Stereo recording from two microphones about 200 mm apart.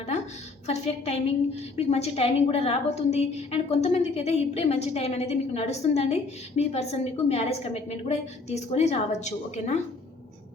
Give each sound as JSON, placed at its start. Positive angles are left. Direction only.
{"t": 0.7, "sound": "a woman's voice", "side_deg": 30}